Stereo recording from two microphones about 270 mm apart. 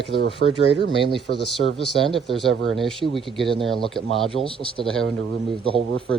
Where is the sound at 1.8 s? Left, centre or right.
Centre.